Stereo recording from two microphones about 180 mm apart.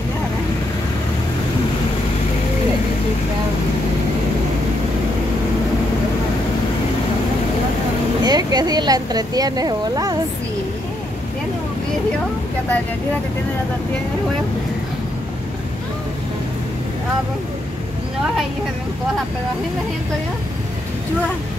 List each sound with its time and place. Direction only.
8.2 s speech: 20° right (ahead or behind)